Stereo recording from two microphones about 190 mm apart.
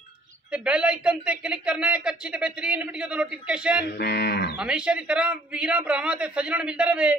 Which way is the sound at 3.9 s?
60° left (ahead or behind).